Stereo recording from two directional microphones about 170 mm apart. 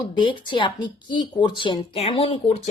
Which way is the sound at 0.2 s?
30° left (ahead or behind).